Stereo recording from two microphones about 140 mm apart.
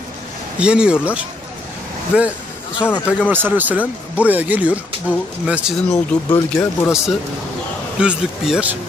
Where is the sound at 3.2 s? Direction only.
15° right (ahead or behind).